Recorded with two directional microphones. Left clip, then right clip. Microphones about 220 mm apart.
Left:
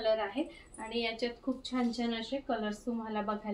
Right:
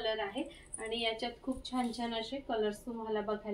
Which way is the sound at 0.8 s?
25° left (ahead or behind).